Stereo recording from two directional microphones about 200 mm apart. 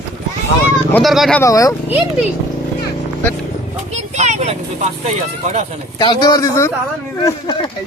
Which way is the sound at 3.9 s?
35° right (ahead or behind).